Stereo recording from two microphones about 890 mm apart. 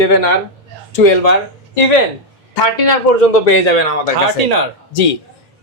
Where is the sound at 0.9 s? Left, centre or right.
Left.